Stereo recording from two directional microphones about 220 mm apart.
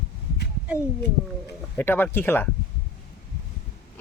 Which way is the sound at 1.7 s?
10° left (ahead or behind).